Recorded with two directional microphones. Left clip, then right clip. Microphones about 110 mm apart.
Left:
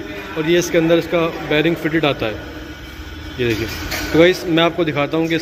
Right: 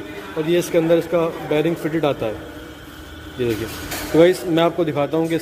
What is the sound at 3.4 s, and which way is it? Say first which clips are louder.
A man's voice: left 3 dB; 20° right (ahead or behind).